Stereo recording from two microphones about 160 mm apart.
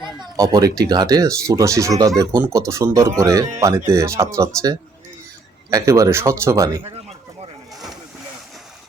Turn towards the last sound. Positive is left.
turn(degrees=0)  # may be behind; listen again after turning